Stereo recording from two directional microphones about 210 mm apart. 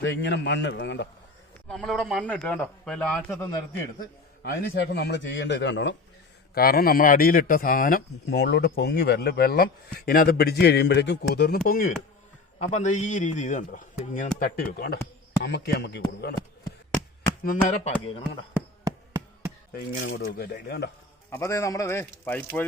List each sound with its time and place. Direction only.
0.0 s a man's voice: 60° left (ahead or behind)
1.6 s a man's voice: centre (ahead or behind)
4.4 s a man's voice: 50° left (ahead or behind)
6.5 s a man's voice: 45° left (ahead or behind)
18.5 s insect: 10° right (ahead or behind)
19.7 s a man's voice: 45° left (ahead or behind)
21.2 s a man's voice: 15° left (ahead or behind)